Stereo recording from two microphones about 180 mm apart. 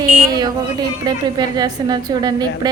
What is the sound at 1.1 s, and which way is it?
A woman's voice, 25° right (ahead or behind).